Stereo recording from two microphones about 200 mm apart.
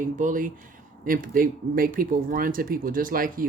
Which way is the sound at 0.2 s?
40° right (ahead or behind).